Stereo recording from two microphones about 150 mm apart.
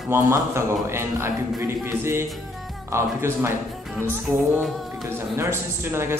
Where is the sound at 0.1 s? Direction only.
15° right (ahead or behind).